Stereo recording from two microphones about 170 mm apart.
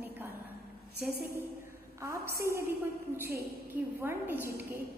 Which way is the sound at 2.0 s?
15° right (ahead or behind).